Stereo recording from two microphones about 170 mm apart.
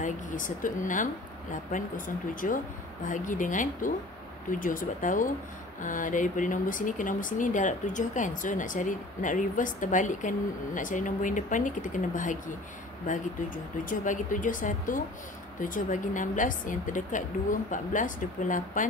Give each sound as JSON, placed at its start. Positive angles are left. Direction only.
{"t": 0.0, "sound": "speech", "side_deg": 50}
{"t": 13.8, "sound": "speech", "side_deg": 50}